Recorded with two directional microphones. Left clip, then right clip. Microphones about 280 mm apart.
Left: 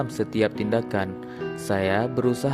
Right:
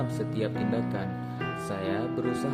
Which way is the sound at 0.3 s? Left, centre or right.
Left.